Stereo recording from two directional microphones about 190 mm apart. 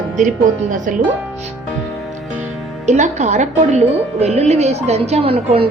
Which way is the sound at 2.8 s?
40° right (ahead or behind).